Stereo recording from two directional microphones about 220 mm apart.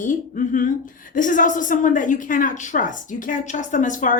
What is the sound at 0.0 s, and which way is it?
A woman's voice, 35° left (ahead or behind).